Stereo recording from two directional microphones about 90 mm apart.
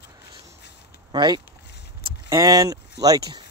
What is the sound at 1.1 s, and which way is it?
Speech, 55° right (ahead or behind).